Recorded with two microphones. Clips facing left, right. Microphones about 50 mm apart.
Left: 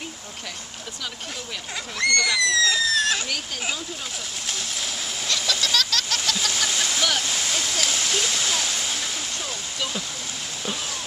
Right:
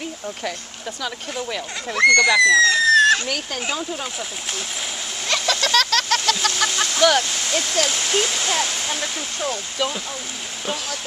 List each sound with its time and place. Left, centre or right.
2.0 s speech: right
5.3 s a sound: right
7.0 s waterfall: right
7.2 s speech: centre
8.6 s waterfall: centre